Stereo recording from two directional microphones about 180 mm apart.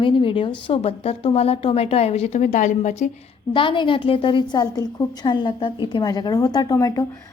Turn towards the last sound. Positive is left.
turn(degrees=20)  # may be behind; listen again after turning